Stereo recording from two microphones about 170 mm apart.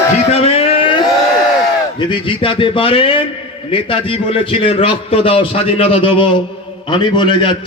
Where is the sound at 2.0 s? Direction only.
30° left (ahead or behind).